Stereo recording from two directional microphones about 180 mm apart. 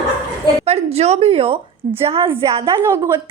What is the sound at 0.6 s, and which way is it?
A woman's voice, 35° right (ahead or behind).